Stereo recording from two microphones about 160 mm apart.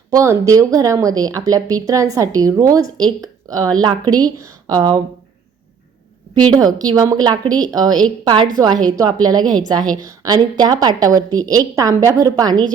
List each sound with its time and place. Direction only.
0.1 s a woman's voice: 20° right (ahead or behind)
6.5 s a woman's voice: 25° right (ahead or behind)